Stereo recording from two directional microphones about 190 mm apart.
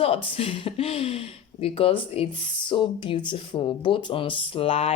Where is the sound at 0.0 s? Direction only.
30° left (ahead or behind).